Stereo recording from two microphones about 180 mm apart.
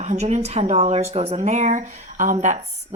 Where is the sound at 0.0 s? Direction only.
40° right (ahead or behind).